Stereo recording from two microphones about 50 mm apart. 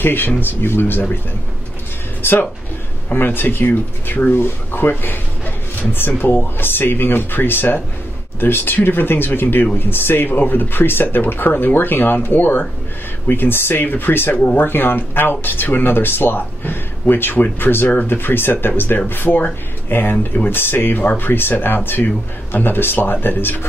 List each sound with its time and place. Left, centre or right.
0.0 s speech: left
3.1 s speech: left
14.3 s speech: left
14.6 s speech: left